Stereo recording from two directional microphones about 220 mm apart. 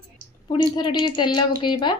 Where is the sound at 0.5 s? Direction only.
20° left (ahead or behind).